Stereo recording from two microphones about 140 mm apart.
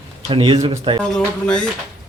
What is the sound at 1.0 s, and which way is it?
Speech, 5° left (ahead or behind).